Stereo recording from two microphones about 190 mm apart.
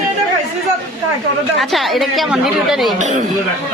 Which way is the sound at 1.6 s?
Centre (ahead or behind).